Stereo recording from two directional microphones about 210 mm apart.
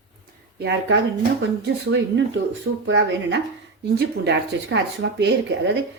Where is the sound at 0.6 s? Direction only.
55° right (ahead or behind).